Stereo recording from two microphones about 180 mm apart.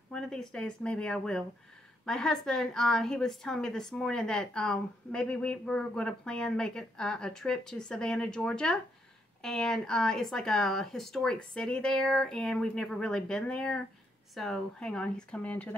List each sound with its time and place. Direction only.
0.1 s a woman's voice: 5° left (ahead or behind)